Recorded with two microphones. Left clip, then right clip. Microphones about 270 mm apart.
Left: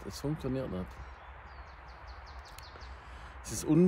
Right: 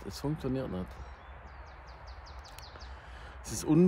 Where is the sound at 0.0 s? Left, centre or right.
Centre.